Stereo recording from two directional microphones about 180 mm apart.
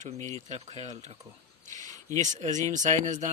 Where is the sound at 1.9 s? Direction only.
20° left (ahead or behind).